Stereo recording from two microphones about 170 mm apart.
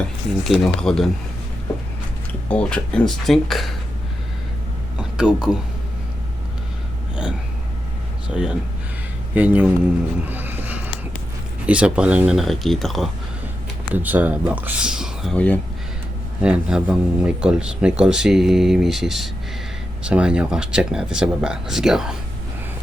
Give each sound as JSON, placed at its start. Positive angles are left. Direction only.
{"t": 0.0, "sound": "speech", "side_deg": 0}
{"t": 2.5, "sound": "speech", "side_deg": 5}
{"t": 5.1, "sound": "speech", "side_deg": -5}
{"t": 8.3, "sound": "speech", "side_deg": -5}
{"t": 10.2, "sound": "a sound", "side_deg": -10}
{"t": 11.6, "sound": "speech", "side_deg": -5}
{"t": 13.8, "sound": "speech", "side_deg": -10}
{"t": 16.4, "sound": "speech", "side_deg": -5}